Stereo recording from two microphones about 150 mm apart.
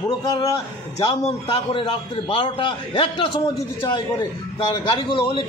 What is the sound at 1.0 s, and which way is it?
A man's voice, 35° left (ahead or behind).